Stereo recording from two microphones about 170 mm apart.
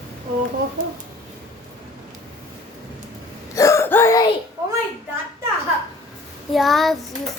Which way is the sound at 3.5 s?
20° left (ahead or behind).